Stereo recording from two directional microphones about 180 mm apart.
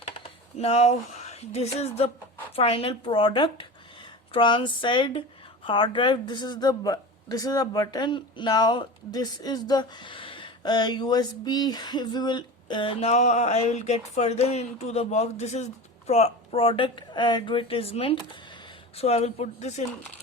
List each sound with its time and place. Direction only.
0.6 s speech: 35° left (ahead or behind)